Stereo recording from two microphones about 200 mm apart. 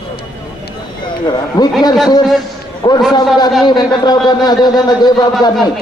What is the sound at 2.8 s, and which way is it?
Speech, 25° left (ahead or behind).